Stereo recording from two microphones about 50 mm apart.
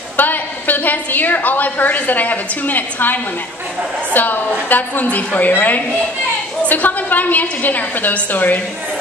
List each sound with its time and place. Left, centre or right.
0.2 s a woman's voice: left